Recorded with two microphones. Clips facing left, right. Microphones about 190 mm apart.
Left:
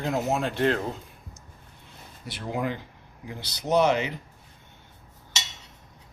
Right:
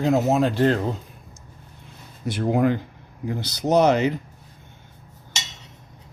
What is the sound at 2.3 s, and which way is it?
Speech, 50° right (ahead or behind).